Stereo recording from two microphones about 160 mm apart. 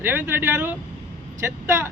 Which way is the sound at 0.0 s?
15° right (ahead or behind).